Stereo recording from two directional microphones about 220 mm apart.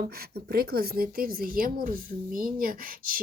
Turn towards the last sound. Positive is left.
turn(degrees=-40)  # may be behind; listen again after turning